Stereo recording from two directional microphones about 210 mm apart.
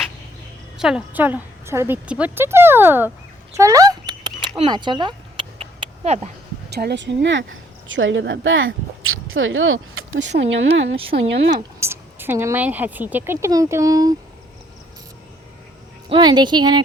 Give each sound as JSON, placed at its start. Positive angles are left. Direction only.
{"t": 0.8, "sound": "a woman's voice", "side_deg": -5}
{"t": 3.6, "sound": "a sound", "side_deg": -15}
{"t": 6.7, "sound": "speech", "side_deg": -50}
{"t": 11.8, "sound": "speech", "side_deg": -10}
{"t": 16.0, "sound": "speech", "side_deg": -20}